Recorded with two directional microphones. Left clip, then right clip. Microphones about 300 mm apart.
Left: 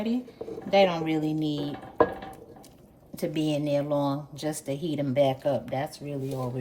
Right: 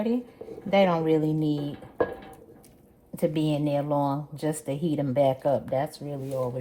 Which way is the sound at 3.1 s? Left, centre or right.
Centre.